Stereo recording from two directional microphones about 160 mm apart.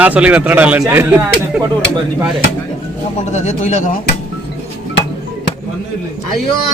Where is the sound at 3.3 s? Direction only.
45° left (ahead or behind).